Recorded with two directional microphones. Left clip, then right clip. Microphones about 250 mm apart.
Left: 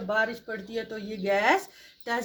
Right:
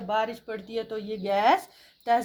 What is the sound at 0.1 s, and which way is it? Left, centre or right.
Speech, right.